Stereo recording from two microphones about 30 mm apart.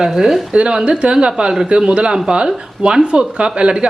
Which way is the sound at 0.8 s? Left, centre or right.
Right.